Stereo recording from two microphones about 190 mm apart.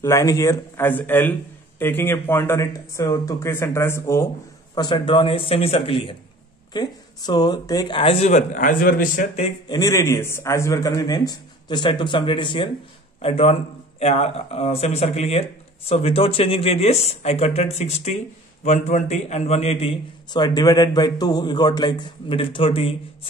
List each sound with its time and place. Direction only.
0.0 s speech: 15° left (ahead or behind)
4.7 s a man's voice: 25° left (ahead or behind); by 9.2 s 50° left (ahead or behind)
9.7 s a man's voice: 20° left (ahead or behind)
20.3 s a man's voice: 20° left (ahead or behind)